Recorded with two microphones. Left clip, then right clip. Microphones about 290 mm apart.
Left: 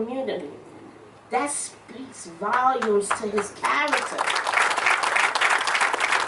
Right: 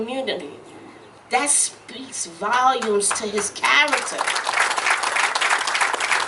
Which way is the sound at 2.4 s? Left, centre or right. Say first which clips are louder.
Right 3 dB; centre.